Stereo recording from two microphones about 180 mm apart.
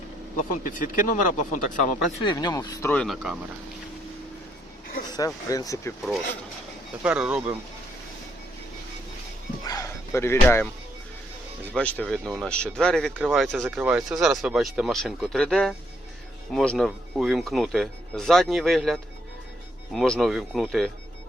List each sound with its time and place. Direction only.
0.3 s speech: 50° left (ahead or behind)
2.2 s speech: 20° left (ahead or behind); by 3.3 s 5° left (ahead or behind)
5.1 s speech: 20° left (ahead or behind)
7.0 s speech: 5° right (ahead or behind)
9.6 s a sound: 15° left (ahead or behind)
11.7 s speech: 5° left (ahead or behind)